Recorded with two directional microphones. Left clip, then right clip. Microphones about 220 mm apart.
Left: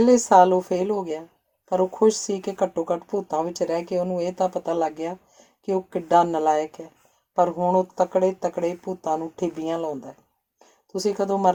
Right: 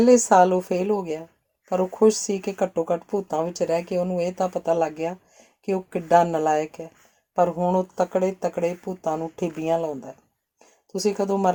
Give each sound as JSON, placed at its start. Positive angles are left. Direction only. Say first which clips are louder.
{"t": 0.0, "sound": "speech", "louder": "even", "side_deg": -40}